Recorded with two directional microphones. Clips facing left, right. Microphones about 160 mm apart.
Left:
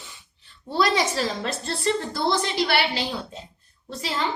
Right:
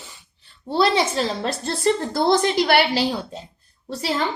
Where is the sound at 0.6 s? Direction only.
30° right (ahead or behind); by 3.3 s 45° right (ahead or behind).